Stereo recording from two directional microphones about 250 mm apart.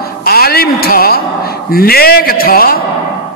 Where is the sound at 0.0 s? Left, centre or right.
Left.